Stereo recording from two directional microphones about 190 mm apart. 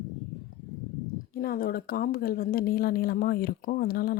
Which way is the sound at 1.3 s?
50° left (ahead or behind).